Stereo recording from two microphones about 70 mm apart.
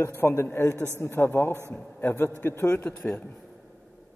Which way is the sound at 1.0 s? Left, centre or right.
Left.